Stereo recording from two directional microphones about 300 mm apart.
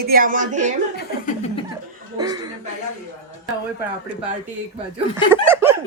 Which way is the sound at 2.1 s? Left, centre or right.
Centre.